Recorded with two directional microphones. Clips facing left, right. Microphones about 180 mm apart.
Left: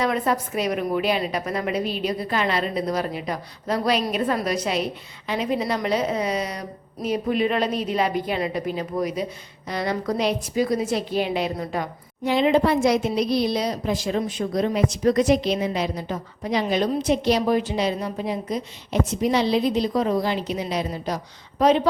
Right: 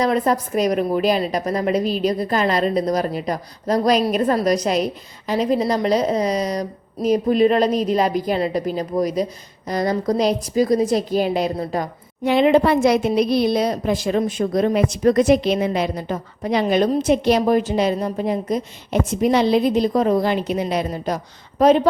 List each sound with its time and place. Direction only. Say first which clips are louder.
0.0 s a woman's voice: right 4 dB; 40° right (ahead or behind)
12.2 s a woman's voice: right 4 dB; 60° right (ahead or behind)